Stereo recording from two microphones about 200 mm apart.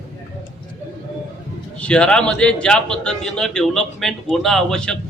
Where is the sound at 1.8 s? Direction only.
5° left (ahead or behind).